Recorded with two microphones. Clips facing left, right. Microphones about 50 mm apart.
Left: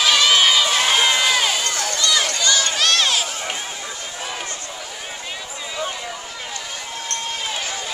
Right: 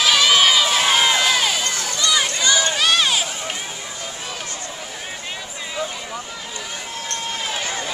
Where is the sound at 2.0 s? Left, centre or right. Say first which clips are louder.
Right 1 dB; centre.